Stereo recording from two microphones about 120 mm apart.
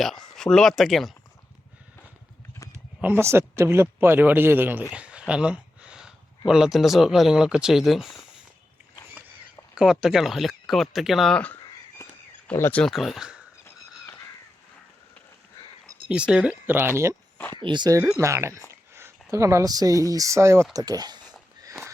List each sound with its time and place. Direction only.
0.0 s speech: centre (ahead or behind)
3.0 s speech: 20° right (ahead or behind); by 8.2 s centre (ahead or behind)
9.7 s speech: 5° right (ahead or behind)
12.0 s a sound: 25° left (ahead or behind)
12.5 s speech: 15° left (ahead or behind)
12.8 s speech: centre (ahead or behind)
16.0 s speech: 10° right (ahead or behind)
17.3 s a sound: 15° left (ahead or behind)
17.6 s speech: 40° right (ahead or behind)
18.2 s speech: 25° right (ahead or behind)